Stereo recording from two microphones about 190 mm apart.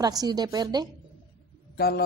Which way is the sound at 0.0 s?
20° right (ahead or behind).